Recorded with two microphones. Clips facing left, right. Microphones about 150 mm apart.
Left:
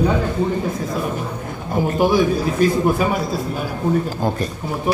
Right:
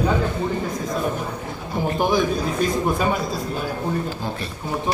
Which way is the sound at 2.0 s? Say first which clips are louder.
Left 4 dB; 5° left (ahead or behind).